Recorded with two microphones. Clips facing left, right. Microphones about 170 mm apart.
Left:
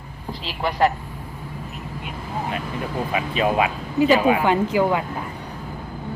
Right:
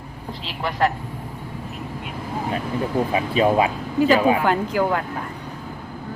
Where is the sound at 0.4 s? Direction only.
Centre (ahead or behind).